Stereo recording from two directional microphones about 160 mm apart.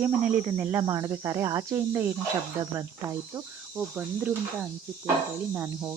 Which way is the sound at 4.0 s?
10° right (ahead or behind).